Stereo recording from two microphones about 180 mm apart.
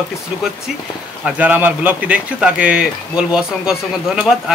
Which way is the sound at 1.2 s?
10° right (ahead or behind).